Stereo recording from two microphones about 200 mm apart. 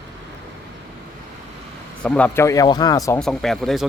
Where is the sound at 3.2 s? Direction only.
Centre (ahead or behind).